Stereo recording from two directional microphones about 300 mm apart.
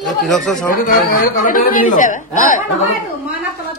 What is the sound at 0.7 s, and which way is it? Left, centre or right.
Speech, left.